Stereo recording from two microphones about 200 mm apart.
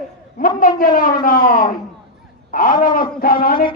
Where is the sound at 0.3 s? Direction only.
45° left (ahead or behind).